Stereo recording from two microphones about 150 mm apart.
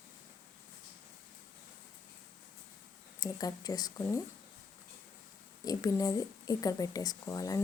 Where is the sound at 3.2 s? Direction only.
25° left (ahead or behind).